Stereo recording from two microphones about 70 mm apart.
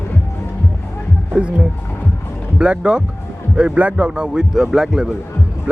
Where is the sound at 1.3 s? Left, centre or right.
Centre.